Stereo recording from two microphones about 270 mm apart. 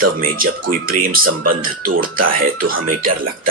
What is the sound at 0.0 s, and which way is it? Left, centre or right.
Speech, right.